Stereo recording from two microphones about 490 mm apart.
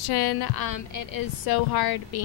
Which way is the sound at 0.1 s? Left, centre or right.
Left.